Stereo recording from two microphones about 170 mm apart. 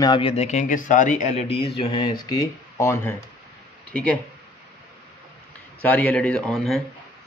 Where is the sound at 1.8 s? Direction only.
25° left (ahead or behind).